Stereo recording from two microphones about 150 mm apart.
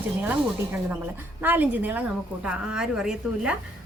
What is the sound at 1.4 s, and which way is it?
A woman's voice, 10° right (ahead or behind).